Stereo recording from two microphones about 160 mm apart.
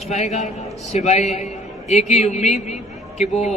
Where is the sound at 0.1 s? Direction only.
45° left (ahead or behind).